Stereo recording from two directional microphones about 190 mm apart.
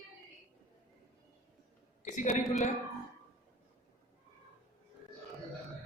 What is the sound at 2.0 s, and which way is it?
Speech, 40° left (ahead or behind).